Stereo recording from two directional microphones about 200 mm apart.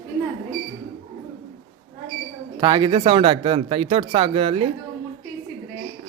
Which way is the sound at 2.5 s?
20° right (ahead or behind).